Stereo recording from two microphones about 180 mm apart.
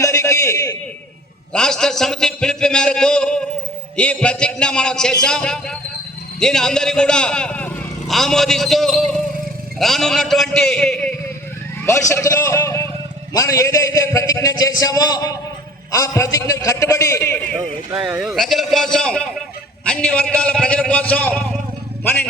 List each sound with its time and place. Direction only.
0.0 s a sound: 15° left (ahead or behind)
1.5 s speech: 5° left (ahead or behind)
11.9 s a man's voice: 15° left (ahead or behind)
18.0 s a man's voice: 5° right (ahead or behind)